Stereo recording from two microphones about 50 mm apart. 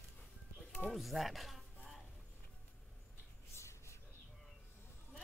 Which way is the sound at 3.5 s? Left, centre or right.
Left.